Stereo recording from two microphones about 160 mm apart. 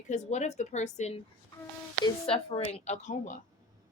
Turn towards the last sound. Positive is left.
turn(degrees=50)  # may be behind; listen again after turning